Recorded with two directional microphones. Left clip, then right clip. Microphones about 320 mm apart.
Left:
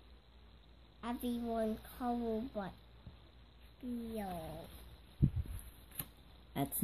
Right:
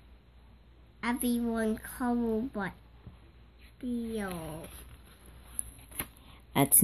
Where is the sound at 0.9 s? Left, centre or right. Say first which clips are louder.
Right 9 dB; centre.